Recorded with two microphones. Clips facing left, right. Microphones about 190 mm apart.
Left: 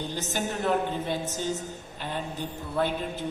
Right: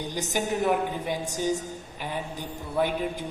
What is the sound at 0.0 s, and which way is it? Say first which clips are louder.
A man's voice: right 2 dB; 15° right (ahead or behind).